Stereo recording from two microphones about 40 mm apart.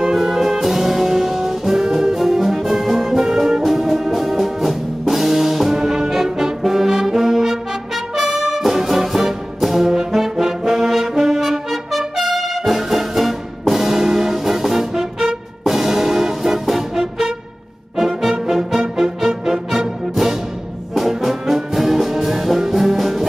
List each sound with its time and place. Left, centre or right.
0.0 s brass instrument: centre
3.2 s music: centre
12.2 s brass instrument: centre
18.5 s music: centre
20.9 s brass instrument: centre